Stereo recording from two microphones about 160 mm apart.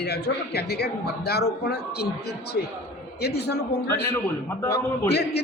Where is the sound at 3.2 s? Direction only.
90° left.